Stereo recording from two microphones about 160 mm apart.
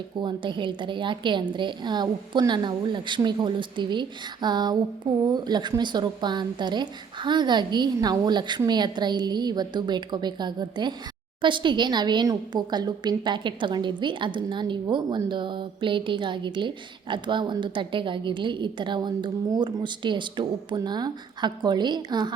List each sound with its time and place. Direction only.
0.2 s a woman's voice: 30° right (ahead or behind)